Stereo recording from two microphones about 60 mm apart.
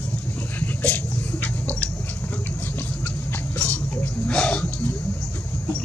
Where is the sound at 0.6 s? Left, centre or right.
Left.